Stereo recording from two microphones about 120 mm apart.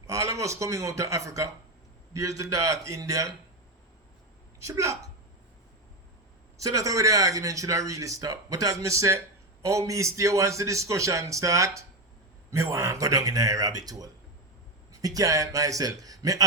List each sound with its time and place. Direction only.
0.1 s speech: 25° right (ahead or behind)
4.7 s speech: 25° right (ahead or behind)
6.6 s speech: 30° right (ahead or behind)